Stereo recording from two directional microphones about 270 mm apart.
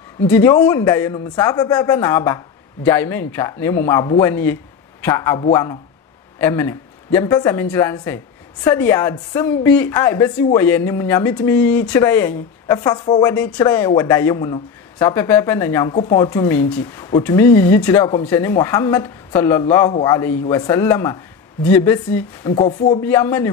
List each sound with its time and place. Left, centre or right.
0.3 s a woman's voice: centre
22.5 s speech: left
23.0 s a woman's voice: centre